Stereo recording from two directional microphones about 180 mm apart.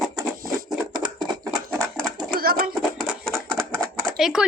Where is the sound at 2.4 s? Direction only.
55° right (ahead or behind).